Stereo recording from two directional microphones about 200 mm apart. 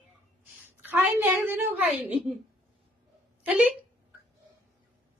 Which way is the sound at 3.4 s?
5° right (ahead or behind).